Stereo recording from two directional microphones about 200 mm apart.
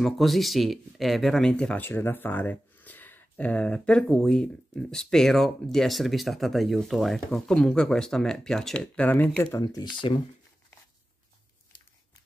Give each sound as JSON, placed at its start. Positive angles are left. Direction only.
{"t": 0.0, "sound": "speech", "side_deg": 0}